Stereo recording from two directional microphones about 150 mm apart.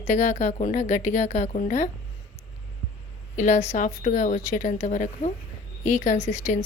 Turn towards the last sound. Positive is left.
turn(degrees=55)  # may be behind; listen again after turning